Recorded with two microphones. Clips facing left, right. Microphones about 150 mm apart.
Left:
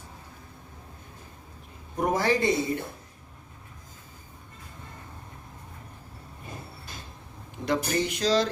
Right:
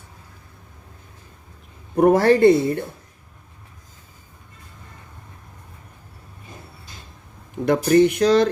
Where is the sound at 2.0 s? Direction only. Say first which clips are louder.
Right 11 dB; 60° right (ahead or behind).